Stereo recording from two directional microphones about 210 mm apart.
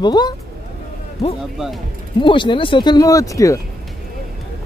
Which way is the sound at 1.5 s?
Centre (ahead or behind).